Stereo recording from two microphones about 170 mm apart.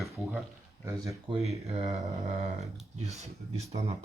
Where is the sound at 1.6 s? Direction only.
40° right (ahead or behind).